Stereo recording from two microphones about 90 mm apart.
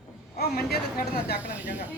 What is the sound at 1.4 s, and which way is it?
Speech, 15° right (ahead or behind).